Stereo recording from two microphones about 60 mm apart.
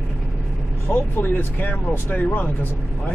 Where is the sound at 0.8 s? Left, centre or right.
Left.